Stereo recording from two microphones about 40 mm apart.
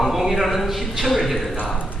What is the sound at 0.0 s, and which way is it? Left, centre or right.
A man's voice, centre.